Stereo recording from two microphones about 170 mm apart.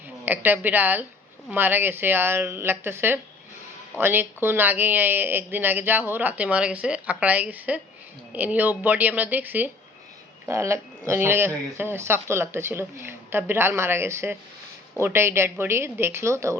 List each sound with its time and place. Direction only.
0.3 s speech: 10° right (ahead or behind)